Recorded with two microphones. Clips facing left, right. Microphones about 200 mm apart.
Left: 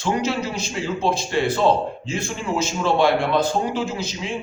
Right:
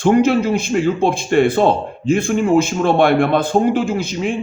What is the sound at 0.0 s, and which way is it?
A man's voice, 55° right (ahead or behind).